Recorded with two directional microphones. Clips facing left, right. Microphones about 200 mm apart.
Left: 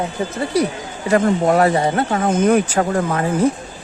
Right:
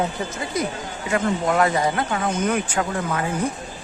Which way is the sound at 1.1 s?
40° left (ahead or behind).